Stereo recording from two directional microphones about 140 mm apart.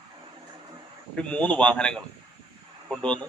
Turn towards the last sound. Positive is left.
turn(degrees=10)  # may be behind; listen again after turning